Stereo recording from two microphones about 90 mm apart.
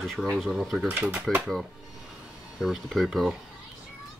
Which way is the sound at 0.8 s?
20° right (ahead or behind).